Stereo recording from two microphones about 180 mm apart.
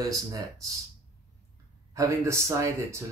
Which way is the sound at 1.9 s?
15° right (ahead or behind).